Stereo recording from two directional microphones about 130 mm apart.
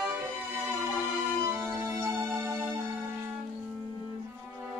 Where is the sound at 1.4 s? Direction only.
25° right (ahead or behind).